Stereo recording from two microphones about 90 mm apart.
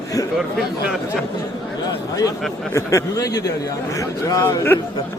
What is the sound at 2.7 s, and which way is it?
Speech, 35° left (ahead or behind).